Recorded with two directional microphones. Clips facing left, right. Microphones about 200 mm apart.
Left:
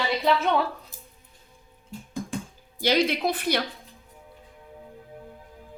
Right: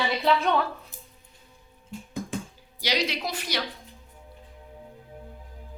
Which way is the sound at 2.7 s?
50° left (ahead or behind).